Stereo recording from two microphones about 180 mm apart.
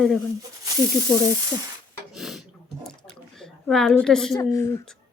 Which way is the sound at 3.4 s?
5° left (ahead or behind).